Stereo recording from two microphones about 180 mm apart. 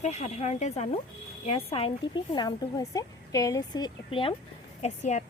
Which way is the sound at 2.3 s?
20° left (ahead or behind).